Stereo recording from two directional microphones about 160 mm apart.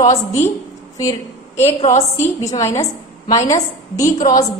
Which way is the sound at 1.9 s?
20° left (ahead or behind).